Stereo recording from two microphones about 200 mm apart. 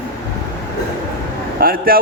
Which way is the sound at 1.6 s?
45° right (ahead or behind).